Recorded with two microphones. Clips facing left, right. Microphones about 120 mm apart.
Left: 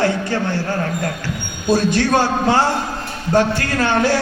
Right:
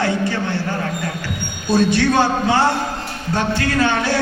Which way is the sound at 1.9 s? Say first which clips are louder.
Even; 50° left (ahead or behind).